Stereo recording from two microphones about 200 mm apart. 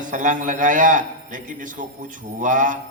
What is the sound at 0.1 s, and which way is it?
A man's voice, 40° right (ahead or behind).